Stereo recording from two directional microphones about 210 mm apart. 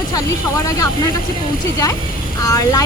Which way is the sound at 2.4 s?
15° left (ahead or behind).